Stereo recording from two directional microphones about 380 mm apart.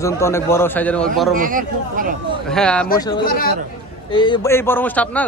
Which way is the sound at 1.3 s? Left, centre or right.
Right.